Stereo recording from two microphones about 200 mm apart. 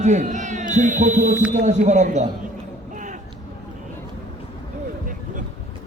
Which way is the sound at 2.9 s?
40° right (ahead or behind).